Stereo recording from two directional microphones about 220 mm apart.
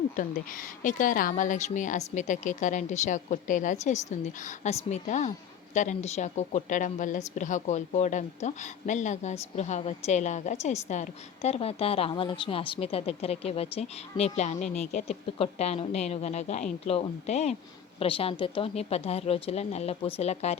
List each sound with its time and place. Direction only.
0.2 s a woman's voice: 35° left (ahead or behind)